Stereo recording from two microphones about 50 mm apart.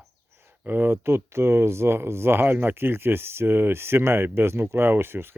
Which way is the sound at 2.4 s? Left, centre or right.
Right.